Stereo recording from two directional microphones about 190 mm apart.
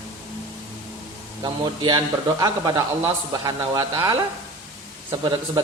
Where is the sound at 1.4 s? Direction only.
25° right (ahead or behind).